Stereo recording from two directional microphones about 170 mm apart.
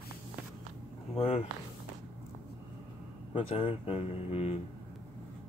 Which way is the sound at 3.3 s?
30° left (ahead or behind).